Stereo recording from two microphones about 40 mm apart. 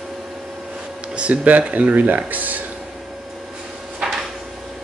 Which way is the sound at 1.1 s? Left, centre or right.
Right.